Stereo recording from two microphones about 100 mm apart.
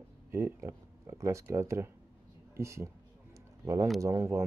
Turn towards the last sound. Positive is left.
turn(degrees=-30)  # may be behind; listen again after turning